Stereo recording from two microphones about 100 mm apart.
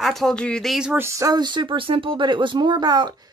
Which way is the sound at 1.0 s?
30° right (ahead or behind).